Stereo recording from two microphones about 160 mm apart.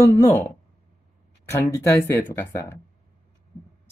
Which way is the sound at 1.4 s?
15° left (ahead or behind).